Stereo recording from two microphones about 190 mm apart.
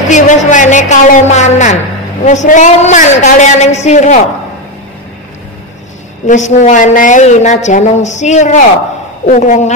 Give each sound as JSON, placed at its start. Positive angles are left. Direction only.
{"t": 0.1, "sound": "a woman's voice", "side_deg": 40}
{"t": 6.2, "sound": "a woman's voice", "side_deg": 40}